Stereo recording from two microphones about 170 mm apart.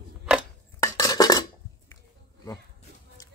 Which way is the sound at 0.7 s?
20° left (ahead or behind).